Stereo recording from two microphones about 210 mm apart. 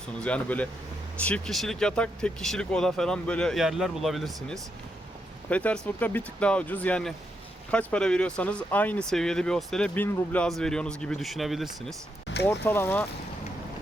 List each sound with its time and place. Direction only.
0.2 s speech: 5° left (ahead or behind)
12.3 s a sound: 60° left (ahead or behind)
12.6 s speech: 10° left (ahead or behind)